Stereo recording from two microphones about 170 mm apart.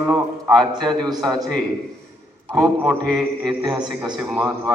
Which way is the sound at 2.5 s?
Centre (ahead or behind).